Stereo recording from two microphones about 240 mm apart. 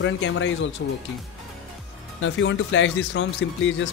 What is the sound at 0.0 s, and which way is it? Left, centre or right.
Speech, left.